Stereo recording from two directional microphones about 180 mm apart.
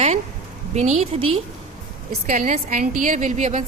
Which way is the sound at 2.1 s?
50° right (ahead or behind).